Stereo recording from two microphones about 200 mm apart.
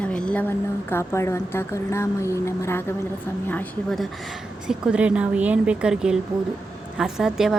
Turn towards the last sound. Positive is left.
turn(degrees=0)  # may be behind; listen again after turning